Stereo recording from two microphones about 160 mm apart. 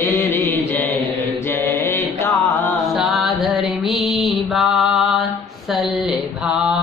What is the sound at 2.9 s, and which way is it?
Music, centre (ahead or behind).